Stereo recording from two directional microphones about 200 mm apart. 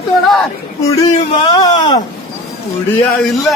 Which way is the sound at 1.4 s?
20° left (ahead or behind).